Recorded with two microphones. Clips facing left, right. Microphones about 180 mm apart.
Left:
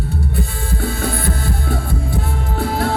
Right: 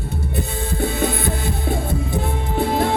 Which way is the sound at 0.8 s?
20° right (ahead or behind).